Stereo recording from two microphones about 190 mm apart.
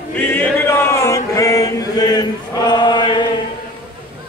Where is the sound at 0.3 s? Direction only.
10° left (ahead or behind).